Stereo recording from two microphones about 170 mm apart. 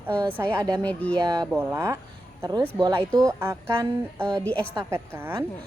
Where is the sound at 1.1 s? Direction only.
25° right (ahead or behind).